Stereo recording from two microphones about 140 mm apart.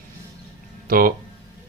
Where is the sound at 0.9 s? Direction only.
90° right.